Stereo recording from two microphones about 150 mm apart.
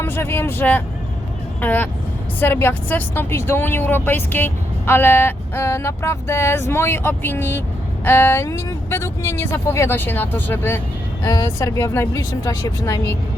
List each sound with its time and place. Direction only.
0.0 s a woman's voice: 15° left (ahead or behind)